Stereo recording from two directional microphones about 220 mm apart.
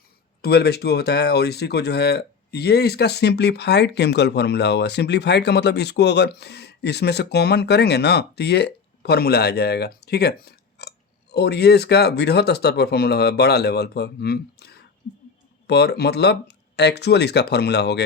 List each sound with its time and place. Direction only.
0.4 s speech: 45° left (ahead or behind)